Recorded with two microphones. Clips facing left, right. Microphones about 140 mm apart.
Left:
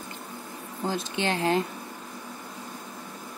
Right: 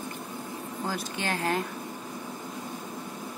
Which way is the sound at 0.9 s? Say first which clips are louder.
Left 5 dB; 25° left (ahead or behind).